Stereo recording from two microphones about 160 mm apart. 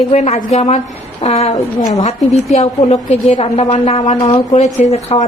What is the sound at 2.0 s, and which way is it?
A woman's voice, 40° left (ahead or behind).